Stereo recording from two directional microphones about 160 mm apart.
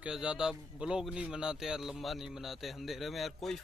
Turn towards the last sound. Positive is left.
turn(degrees=0)  # may be behind; listen again after turning